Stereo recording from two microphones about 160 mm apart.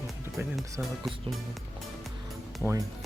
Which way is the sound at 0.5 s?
Centre (ahead or behind).